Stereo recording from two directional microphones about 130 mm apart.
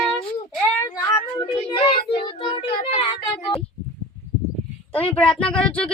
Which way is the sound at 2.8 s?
65° left (ahead or behind).